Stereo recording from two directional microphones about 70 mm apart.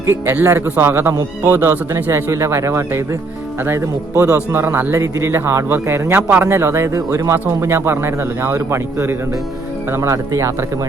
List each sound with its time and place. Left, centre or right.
0.0 s speech: right
6.5 s speech: right